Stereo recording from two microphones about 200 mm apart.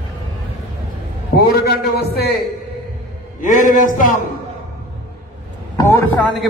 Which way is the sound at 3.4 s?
40° left (ahead or behind).